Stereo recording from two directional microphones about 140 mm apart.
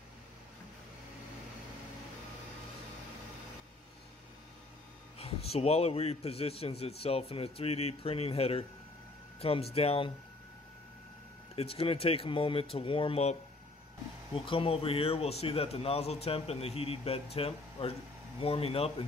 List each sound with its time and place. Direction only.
5.2 s speech: 45° left (ahead or behind)
11.5 s speech: 45° left (ahead or behind)